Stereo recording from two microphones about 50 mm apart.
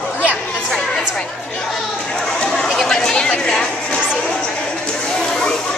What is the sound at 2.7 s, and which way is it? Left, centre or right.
Speech, centre.